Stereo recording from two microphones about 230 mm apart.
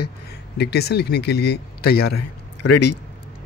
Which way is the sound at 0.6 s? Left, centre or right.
Left.